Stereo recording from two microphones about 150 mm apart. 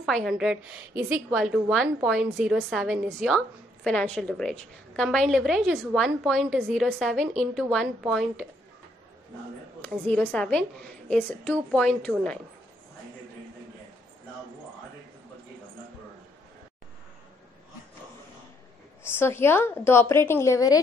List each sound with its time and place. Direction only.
0.0 s a woman's voice: centre (ahead or behind)
9.8 s a woman's voice: 10° left (ahead or behind)
19.0 s a woman's voice: 15° left (ahead or behind)